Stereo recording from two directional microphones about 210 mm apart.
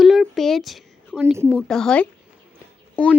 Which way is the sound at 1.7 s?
5° left (ahead or behind).